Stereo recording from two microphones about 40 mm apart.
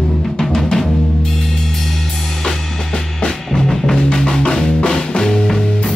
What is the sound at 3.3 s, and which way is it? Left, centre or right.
Music, centre.